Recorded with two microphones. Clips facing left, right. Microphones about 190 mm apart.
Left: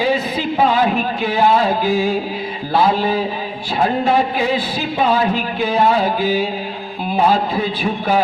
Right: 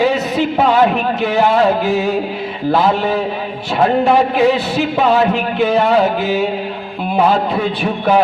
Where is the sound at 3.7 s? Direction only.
75° right (ahead or behind).